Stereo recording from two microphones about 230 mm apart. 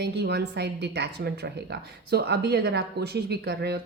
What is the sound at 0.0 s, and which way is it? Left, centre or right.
A woman's voice, right.